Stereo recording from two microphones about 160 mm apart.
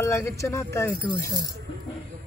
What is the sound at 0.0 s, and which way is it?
Speech, 20° left (ahead or behind).